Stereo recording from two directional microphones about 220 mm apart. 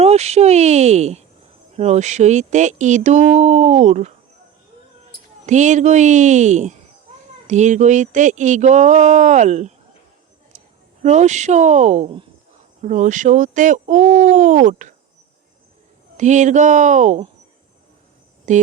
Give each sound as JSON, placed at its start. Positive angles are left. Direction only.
{"t": 0.0, "sound": "speech", "side_deg": -30}
{"t": 5.5, "sound": "speech", "side_deg": -35}
{"t": 11.0, "sound": "speech", "side_deg": -30}
{"t": 16.1, "sound": "speech", "side_deg": -35}
{"t": 18.5, "sound": "speech", "side_deg": -35}